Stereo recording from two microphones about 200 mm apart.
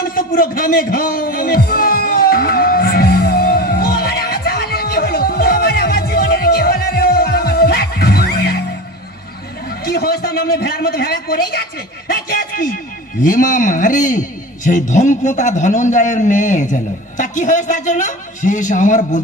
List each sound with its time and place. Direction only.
0.0 s music: 45° left (ahead or behind)
9.8 s a man's voice: 50° left (ahead or behind)